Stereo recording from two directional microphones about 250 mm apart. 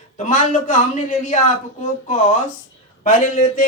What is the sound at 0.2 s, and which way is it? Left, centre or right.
Speech, left.